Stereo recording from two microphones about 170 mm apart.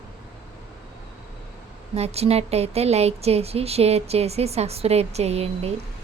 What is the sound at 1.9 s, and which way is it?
Speech, 40° right (ahead or behind).